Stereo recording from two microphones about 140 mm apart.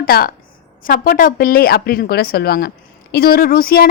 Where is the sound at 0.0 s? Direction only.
90° left.